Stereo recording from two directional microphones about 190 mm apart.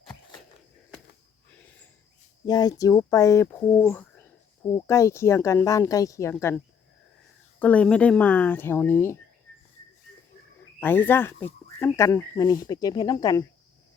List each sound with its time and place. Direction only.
2.5 s speech: 20° left (ahead or behind)
3.8 s a sound: 10° left (ahead or behind)
4.9 s speech: 15° left (ahead or behind)
7.6 s speech: 5° left (ahead or behind)
10.8 s speech: 10° left (ahead or behind)